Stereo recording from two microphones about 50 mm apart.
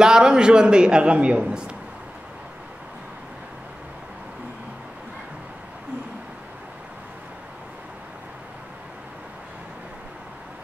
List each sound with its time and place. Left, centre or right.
0.0 s a man's voice: centre